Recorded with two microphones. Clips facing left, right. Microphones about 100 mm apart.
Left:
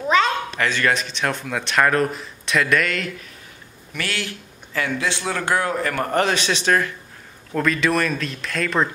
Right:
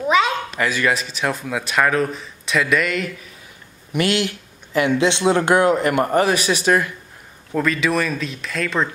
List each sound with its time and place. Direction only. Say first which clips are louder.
0.0 s speech: right 1 dB; 5° right (ahead or behind)
3.9 s a man's voice: right 8 dB; 20° right (ahead or behind)
6.1 s speech: right 3 dB; 10° right (ahead or behind)